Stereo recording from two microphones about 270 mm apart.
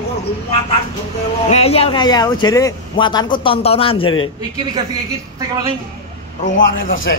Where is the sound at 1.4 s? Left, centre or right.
Left.